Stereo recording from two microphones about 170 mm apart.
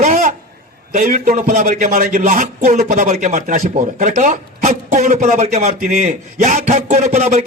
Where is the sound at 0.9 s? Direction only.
50° right (ahead or behind).